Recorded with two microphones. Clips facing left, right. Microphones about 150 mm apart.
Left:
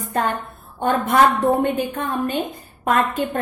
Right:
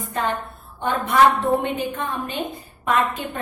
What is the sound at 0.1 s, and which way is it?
A woman's voice, 45° left (ahead or behind).